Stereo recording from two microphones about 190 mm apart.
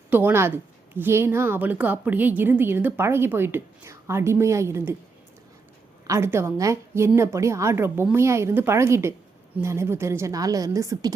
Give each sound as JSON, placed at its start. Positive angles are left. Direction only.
{"t": 0.1, "sound": "a woman's voice", "side_deg": -10}
{"t": 6.1, "sound": "a woman's voice", "side_deg": -15}